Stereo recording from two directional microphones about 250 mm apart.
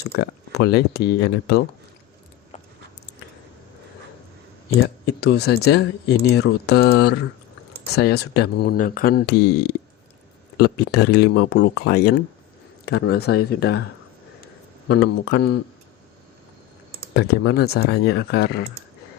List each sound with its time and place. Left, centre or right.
0.2 s speech: left
4.8 s speech: left
14.4 s a sound: left
17.2 s speech: left